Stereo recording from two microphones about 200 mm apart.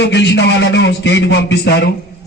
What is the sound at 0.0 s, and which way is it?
A man's voice, 60° left (ahead or behind).